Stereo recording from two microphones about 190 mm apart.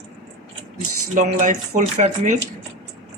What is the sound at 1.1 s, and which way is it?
Speech, 40° right (ahead or behind).